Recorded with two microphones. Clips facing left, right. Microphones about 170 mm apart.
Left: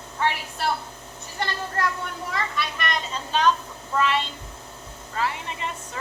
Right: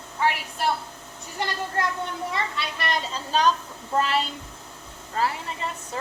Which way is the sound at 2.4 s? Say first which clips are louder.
Left 1 dB; 30° right (ahead or behind).